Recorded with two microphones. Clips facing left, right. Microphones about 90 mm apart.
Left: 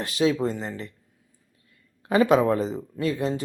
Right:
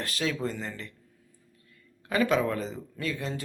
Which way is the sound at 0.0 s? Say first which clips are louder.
Left 8 dB; 20° left (ahead or behind).